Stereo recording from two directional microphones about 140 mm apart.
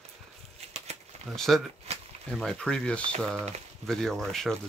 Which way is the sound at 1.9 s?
50° right (ahead or behind).